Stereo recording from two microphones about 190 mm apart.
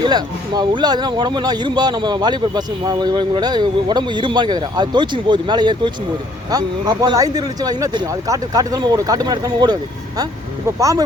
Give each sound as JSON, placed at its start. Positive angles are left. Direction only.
{"t": 0.0, "sound": "speech", "side_deg": -20}
{"t": 10.8, "sound": "speech", "side_deg": -15}